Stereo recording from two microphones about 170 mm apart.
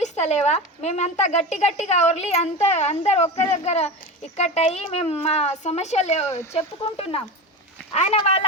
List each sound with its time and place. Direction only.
0.0 s speech: 40° left (ahead or behind)